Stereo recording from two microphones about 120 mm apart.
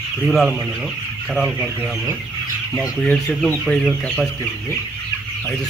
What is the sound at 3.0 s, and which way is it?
Speech, centre (ahead or behind).